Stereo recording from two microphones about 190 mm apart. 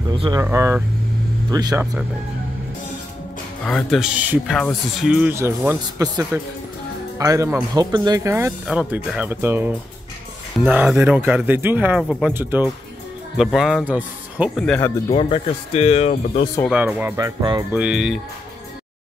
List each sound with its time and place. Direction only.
0.1 s speech: 20° right (ahead or behind)
3.6 s speech: centre (ahead or behind)
15.0 s speech: 30° left (ahead or behind)
16.7 s speech: 10° right (ahead or behind)
17.7 s speech: 5° right (ahead or behind)